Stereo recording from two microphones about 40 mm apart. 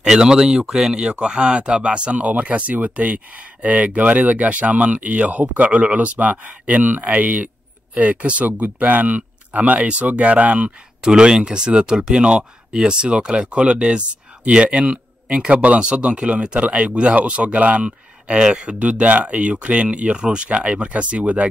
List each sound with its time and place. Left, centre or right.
0.0 s speech: centre; by 10.7 s right
11.0 s speech: right